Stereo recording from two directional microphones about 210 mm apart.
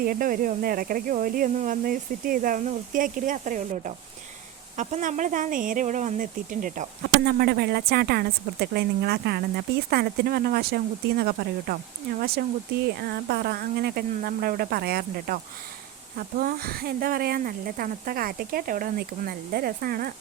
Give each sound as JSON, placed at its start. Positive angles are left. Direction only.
{"t": 0.0, "sound": "speech", "side_deg": -45}
{"t": 16.4, "sound": "speech", "side_deg": -45}